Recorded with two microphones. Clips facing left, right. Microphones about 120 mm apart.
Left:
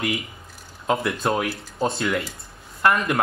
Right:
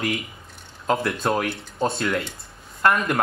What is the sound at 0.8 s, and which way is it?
Speech, centre (ahead or behind).